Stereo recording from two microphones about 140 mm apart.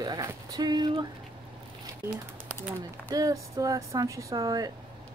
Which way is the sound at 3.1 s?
25° right (ahead or behind).